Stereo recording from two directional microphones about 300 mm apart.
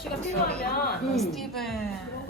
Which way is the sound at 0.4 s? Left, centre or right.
Left.